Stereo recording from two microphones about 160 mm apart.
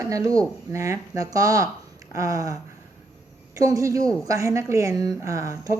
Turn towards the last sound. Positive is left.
turn(degrees=-20)  # may be behind; listen again after turning